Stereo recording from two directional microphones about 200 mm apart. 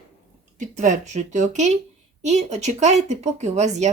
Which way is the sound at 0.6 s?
40° right (ahead or behind).